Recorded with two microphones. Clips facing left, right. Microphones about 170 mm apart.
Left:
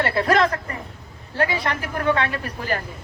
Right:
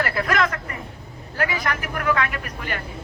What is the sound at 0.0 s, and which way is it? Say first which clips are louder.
A man's voice: left 3 dB; 30° left (ahead or behind).